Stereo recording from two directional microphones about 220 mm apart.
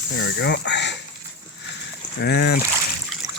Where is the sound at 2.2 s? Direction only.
50° left (ahead or behind).